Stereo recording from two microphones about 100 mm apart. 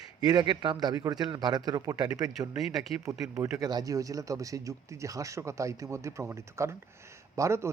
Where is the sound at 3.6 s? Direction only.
40° right (ahead or behind).